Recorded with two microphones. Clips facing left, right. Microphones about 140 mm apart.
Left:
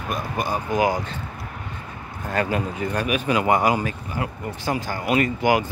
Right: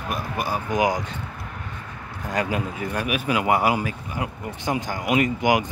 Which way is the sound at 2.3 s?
10° right (ahead or behind).